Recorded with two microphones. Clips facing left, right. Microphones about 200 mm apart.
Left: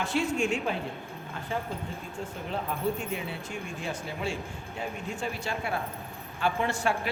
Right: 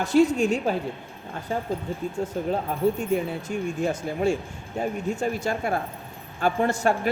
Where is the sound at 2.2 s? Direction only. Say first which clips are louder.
Right 7 dB; 45° right (ahead or behind).